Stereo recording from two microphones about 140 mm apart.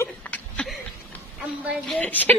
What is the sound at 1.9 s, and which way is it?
Speech, 10° left (ahead or behind).